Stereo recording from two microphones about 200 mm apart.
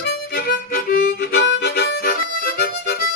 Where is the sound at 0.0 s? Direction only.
50° left (ahead or behind).